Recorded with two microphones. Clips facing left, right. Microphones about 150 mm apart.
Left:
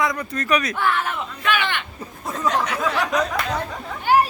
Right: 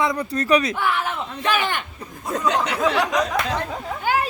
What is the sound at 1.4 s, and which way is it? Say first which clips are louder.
Speech: right 1 dB; 40° right (ahead or behind).